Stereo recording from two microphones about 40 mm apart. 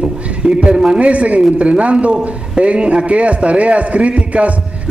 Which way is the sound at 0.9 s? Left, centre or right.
Right.